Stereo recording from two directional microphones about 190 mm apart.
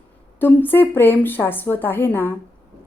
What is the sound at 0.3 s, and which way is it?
A woman's voice, 10° left (ahead or behind).